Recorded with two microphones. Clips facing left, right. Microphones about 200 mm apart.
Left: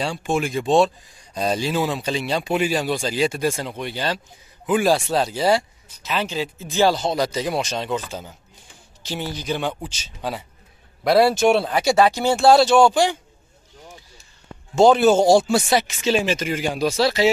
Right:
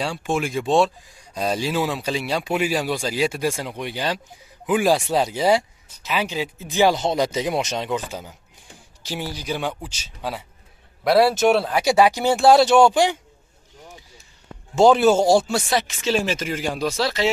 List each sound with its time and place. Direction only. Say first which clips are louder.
0.0 s speech: left 1 dB; centre (ahead or behind)
11.8 s speech: even; 15° right (ahead or behind)
14.8 s speech: left 1 dB; 5° right (ahead or behind)